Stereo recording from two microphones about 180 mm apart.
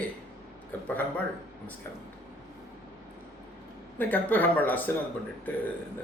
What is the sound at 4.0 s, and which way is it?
Speech, 10° left (ahead or behind).